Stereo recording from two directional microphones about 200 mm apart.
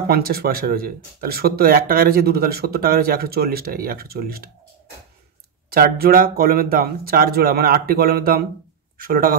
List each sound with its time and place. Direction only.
0.1 s speech: 50° right (ahead or behind)
5.7 s speech: 50° right (ahead or behind)